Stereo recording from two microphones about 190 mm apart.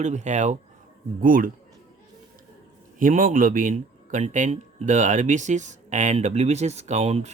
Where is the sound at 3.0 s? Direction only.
45° right (ahead or behind).